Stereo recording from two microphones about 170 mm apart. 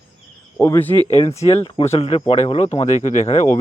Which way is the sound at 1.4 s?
35° left (ahead or behind).